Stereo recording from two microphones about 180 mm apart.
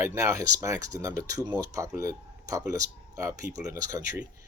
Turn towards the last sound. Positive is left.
turn(degrees=-20)  # may be behind; listen again after turning